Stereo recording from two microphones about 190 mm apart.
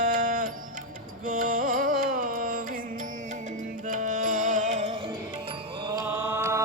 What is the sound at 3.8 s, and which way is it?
Music, 45° right (ahead or behind).